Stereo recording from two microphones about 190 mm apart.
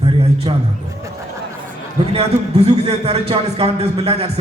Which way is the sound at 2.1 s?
30° right (ahead or behind).